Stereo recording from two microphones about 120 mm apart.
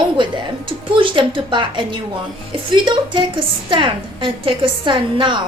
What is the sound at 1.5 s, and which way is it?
A woman's voice, 40° right (ahead or behind).